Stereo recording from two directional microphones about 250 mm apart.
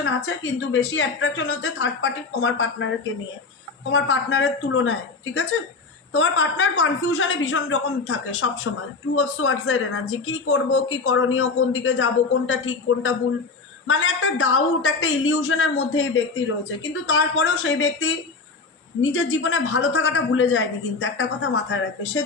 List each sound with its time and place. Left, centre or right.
0.3 s speech: left
3.9 s speech: left
19.1 s speech: left